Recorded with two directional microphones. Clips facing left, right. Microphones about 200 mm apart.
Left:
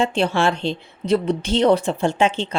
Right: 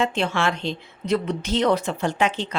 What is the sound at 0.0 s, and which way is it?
A woman's voice, 30° left (ahead or behind).